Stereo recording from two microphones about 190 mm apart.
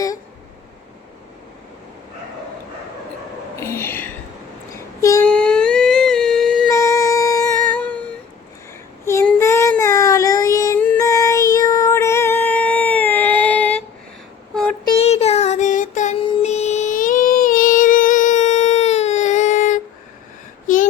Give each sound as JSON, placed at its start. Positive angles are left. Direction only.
{"t": 3.6, "sound": "a sound", "side_deg": 15}
{"t": 5.3, "sound": "humming", "side_deg": 5}
{"t": 6.7, "sound": "music", "side_deg": 15}
{"t": 9.0, "sound": "child singing", "side_deg": 15}
{"t": 14.8, "sound": "child singing", "side_deg": 35}
{"t": 16.2, "sound": "music", "side_deg": 30}